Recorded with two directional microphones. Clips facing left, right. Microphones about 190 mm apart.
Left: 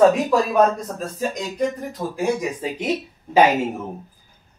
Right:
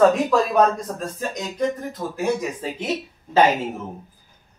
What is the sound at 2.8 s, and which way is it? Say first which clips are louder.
Speech: left 2 dB; 15° left (ahead or behind).